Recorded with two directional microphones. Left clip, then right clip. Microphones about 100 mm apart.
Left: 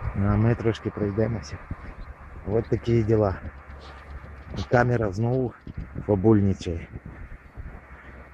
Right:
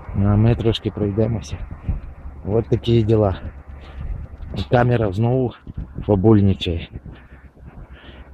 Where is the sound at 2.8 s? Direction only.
50° right (ahead or behind).